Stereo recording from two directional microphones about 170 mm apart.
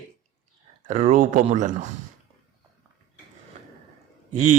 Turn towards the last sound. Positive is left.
turn(degrees=-45)  # may be behind; listen again after turning